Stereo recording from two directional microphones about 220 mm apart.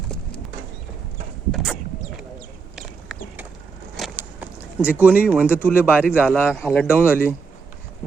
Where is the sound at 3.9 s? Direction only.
5° right (ahead or behind).